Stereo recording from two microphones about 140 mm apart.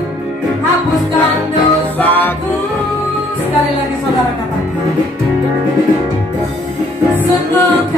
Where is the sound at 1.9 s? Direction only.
15° left (ahead or behind).